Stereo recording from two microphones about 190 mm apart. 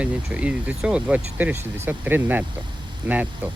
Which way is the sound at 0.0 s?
5° right (ahead or behind).